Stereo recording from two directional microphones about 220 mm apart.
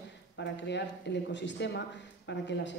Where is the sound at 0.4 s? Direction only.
50° left (ahead or behind).